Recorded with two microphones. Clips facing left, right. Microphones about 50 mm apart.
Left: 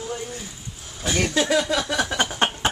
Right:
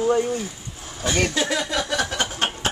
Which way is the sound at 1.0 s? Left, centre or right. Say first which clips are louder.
Even; centre.